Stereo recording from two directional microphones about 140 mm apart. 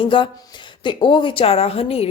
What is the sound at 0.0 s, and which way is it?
Speech, 35° left (ahead or behind).